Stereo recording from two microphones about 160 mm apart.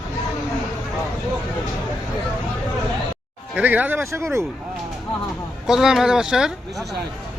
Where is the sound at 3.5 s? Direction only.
10° right (ahead or behind).